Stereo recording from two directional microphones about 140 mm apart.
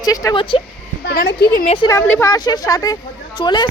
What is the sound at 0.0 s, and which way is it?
Speech, 25° left (ahead or behind).